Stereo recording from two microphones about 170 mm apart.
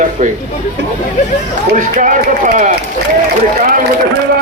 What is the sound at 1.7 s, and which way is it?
Speech, 50° right (ahead or behind).